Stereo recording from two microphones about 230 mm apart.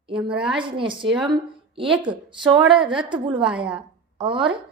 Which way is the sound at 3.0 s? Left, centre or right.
Right.